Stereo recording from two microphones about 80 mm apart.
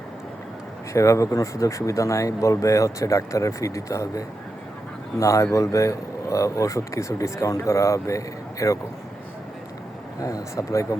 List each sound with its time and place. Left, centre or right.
0.9 s speech: left
10.2 s speech: left